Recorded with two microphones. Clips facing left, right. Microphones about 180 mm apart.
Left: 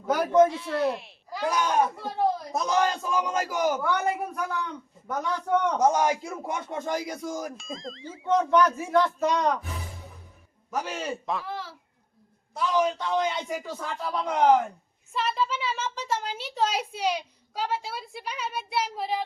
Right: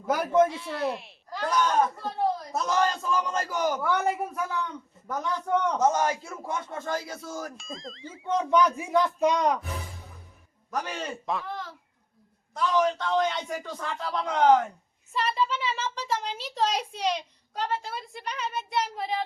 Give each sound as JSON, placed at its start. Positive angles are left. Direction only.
{"t": 0.1, "sound": "a woman's voice", "side_deg": 0}
{"t": 3.8, "sound": "a woman's voice", "side_deg": 0}
{"t": 7.5, "sound": "a woman's voice", "side_deg": 0}
{"t": 8.4, "sound": "speech", "side_deg": -15}
{"t": 10.7, "sound": "a woman's voice", "side_deg": 5}